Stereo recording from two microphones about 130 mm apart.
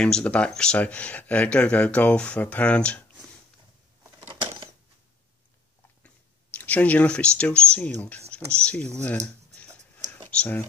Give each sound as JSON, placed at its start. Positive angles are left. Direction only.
{"t": 0.0, "sound": "speech", "side_deg": 10}
{"t": 4.3, "sound": "a sound", "side_deg": -40}
{"t": 6.6, "sound": "speech", "side_deg": 10}
{"t": 10.2, "sound": "computer keyboard", "side_deg": 10}